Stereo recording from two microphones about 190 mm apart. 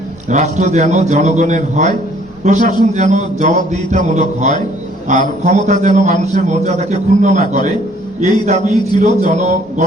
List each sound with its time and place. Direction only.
0.3 s a man's voice: 40° right (ahead or behind)